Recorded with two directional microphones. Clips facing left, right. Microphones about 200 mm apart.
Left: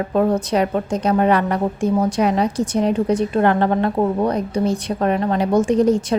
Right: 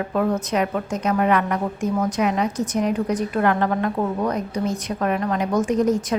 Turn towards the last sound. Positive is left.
turn(degrees=30)  # may be behind; listen again after turning